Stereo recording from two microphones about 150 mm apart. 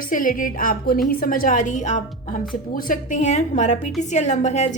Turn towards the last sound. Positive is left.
turn(degrees=50)  # may be behind; listen again after turning